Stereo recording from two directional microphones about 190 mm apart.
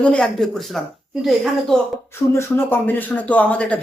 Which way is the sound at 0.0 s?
5° left (ahead or behind).